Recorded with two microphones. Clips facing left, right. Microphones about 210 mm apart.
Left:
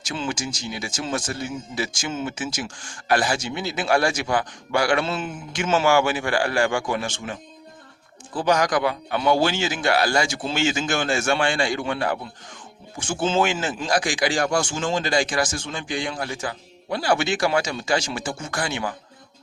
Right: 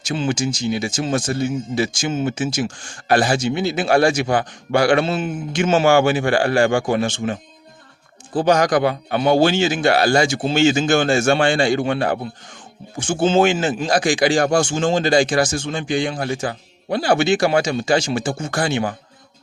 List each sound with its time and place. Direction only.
0.1 s a man's voice: 25° right (ahead or behind)
8.4 s a man's voice: 30° right (ahead or behind)